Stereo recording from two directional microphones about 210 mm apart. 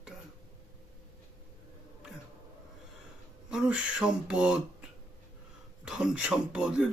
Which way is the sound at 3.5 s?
5° right (ahead or behind).